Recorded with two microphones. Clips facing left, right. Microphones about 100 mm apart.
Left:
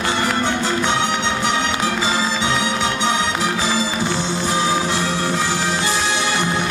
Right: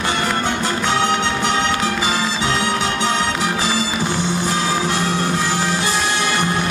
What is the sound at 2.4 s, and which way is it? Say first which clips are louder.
Music: even; 20° left (ahead or behind).